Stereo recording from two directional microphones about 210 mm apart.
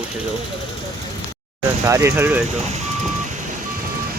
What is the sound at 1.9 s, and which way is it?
Speech, 15° right (ahead or behind).